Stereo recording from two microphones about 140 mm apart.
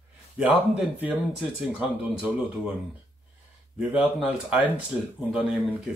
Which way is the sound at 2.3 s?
5° right (ahead or behind).